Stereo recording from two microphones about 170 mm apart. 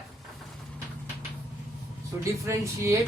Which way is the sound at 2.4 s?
15° right (ahead or behind).